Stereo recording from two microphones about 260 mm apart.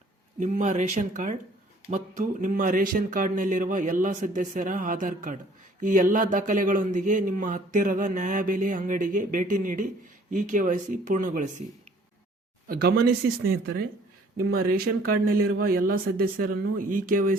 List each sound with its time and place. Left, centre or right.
0.3 s speech: right
12.6 s speech: right